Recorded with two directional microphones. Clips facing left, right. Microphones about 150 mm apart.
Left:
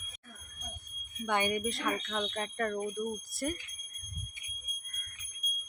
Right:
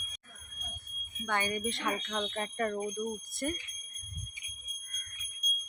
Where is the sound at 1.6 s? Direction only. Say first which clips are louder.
Even; centre (ahead or behind).